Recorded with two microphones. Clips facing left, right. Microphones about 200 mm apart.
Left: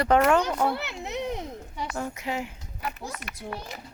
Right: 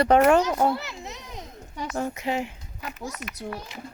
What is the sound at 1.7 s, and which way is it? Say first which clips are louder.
Speech: right 4 dB; 45° right (ahead or behind).